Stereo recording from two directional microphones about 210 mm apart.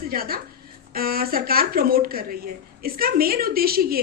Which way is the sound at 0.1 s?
45° right (ahead or behind).